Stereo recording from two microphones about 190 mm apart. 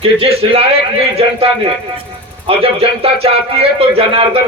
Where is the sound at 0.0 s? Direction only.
30° right (ahead or behind).